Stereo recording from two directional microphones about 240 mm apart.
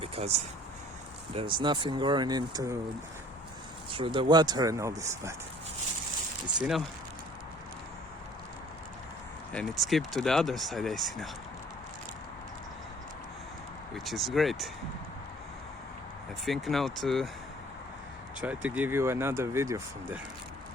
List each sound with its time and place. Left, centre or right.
0.0 s speech: right
3.9 s speech: right
6.6 s speech: centre
9.5 s speech: centre
13.9 s speech: centre
16.5 s speech: centre
18.3 s speech: centre